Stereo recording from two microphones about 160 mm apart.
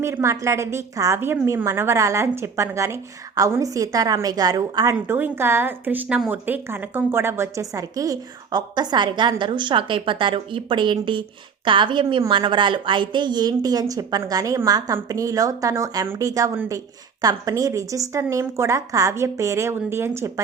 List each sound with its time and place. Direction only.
0.0 s a woman's voice: 15° right (ahead or behind)